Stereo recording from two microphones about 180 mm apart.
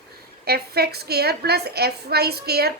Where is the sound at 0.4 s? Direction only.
60° right (ahead or behind).